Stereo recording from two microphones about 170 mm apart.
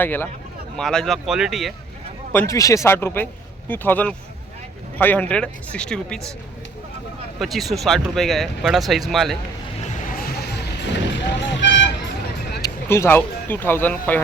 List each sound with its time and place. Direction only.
0.0 s speech: 10° left (ahead or behind)
2.3 s speech: 15° left (ahead or behind)
7.3 s speech: centre (ahead or behind)
10.2 s music: 65° left (ahead or behind)
11.4 s vehicle: 90° left
12.6 s speech: 15° left (ahead or behind)